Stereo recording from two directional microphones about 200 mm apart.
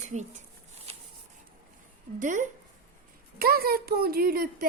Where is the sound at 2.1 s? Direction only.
40° right (ahead or behind).